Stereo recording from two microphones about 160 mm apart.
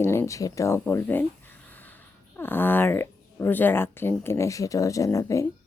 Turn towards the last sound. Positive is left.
turn(degrees=20)  # may be behind; listen again after turning